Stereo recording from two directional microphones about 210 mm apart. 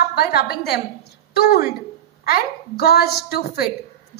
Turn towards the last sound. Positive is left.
turn(degrees=50)  # may be behind; listen again after turning